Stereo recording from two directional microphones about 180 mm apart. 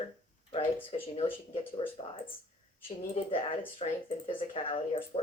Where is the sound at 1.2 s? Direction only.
30° left (ahead or behind).